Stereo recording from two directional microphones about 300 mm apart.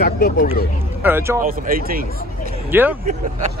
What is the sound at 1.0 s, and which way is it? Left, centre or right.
Speech, centre.